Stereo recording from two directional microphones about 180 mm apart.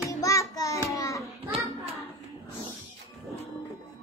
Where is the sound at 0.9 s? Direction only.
20° left (ahead or behind).